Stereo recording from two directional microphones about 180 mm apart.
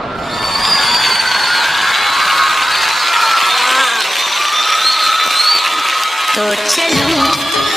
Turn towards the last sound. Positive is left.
turn(degrees=0)  # may be behind; listen again after turning